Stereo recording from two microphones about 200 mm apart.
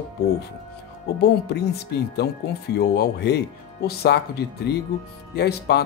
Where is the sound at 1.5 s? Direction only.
55° left (ahead or behind).